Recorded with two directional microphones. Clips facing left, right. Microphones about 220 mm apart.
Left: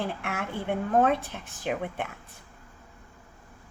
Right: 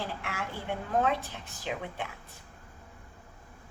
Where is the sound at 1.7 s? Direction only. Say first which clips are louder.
Left 5 dB; 55° left (ahead or behind).